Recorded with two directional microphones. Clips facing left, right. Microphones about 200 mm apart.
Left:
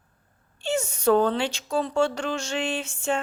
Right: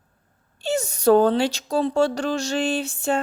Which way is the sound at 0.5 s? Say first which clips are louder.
Right 2 dB; 40° right (ahead or behind).